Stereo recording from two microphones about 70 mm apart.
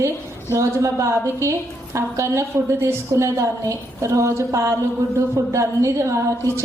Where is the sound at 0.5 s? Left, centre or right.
Right.